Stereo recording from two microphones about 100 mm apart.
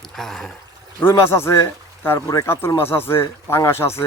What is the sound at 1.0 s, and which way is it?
Speech, 25° left (ahead or behind).